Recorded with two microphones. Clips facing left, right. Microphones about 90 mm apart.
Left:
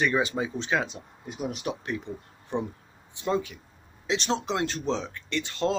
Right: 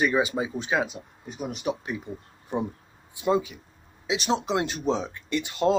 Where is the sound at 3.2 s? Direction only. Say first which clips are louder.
Right 4 dB; 10° right (ahead or behind).